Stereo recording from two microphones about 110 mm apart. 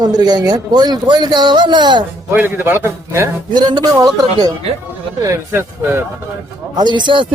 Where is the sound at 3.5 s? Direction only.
40° right (ahead or behind).